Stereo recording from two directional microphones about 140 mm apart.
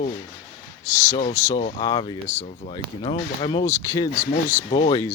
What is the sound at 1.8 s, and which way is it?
Speech, 30° left (ahead or behind).